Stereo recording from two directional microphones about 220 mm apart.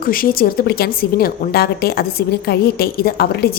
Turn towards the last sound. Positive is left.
turn(degrees=45)  # may be behind; listen again after turning